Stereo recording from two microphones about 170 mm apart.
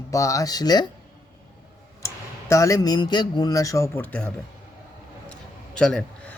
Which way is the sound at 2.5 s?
20° left (ahead or behind).